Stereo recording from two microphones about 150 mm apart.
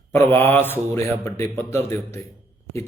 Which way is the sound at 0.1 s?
15° left (ahead or behind).